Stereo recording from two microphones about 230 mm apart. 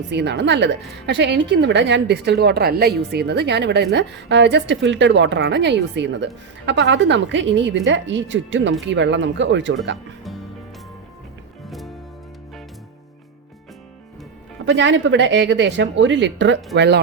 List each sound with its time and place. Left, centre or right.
0.1 s a woman's voice: right
11.7 s music: centre
14.6 s a woman's voice: right